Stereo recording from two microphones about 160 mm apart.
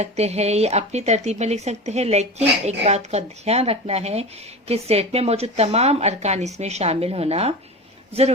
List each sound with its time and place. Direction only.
0.0 s a woman's voice: 40° right (ahead or behind)